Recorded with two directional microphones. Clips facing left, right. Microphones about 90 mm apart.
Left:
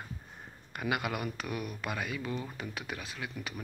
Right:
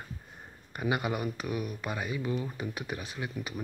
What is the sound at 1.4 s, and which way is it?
Speech, 5° right (ahead or behind).